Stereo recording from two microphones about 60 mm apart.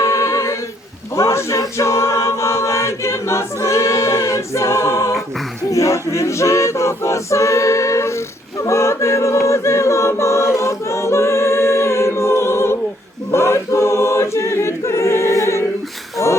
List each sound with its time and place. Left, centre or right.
0.0 s a capella: left
13.3 s choir: left
16.2 s music: left